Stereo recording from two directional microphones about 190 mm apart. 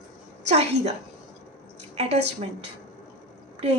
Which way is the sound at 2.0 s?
35° right (ahead or behind).